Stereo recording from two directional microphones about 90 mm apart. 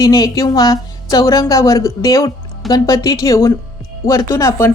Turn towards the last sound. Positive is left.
turn(degrees=35)  # may be behind; listen again after turning